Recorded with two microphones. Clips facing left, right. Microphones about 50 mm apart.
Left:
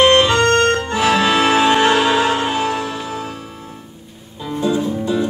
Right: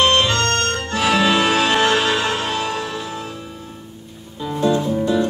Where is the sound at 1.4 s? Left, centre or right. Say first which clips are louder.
Left 3 dB; left.